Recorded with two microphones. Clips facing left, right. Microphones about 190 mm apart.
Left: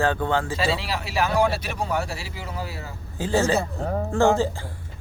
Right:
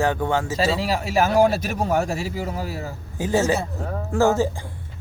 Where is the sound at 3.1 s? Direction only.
15° right (ahead or behind).